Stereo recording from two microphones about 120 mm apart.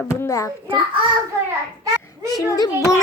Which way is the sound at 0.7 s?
45° right (ahead or behind).